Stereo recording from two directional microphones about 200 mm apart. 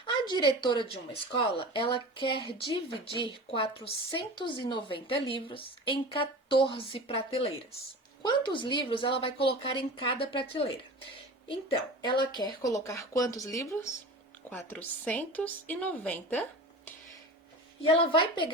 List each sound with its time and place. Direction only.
0.3 s a woman's voice: 25° left (ahead or behind); by 16.4 s 10° left (ahead or behind)
17.8 s a woman's voice: 25° left (ahead or behind)